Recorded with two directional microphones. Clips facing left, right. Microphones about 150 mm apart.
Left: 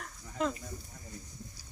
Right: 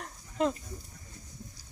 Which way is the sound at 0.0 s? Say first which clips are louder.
Right 4 dB; 20° right (ahead or behind).